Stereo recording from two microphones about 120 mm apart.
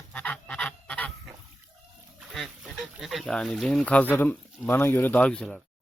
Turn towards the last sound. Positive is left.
turn(degrees=5)  # may be behind; listen again after turning